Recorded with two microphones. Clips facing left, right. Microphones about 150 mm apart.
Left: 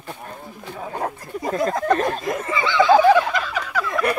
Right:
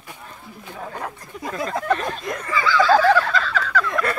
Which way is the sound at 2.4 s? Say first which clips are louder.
Right 1 dB; 20° left (ahead or behind).